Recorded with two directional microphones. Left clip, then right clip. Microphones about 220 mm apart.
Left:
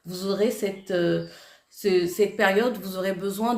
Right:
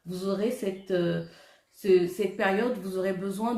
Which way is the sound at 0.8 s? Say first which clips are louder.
Left 5 dB; 45° left (ahead or behind).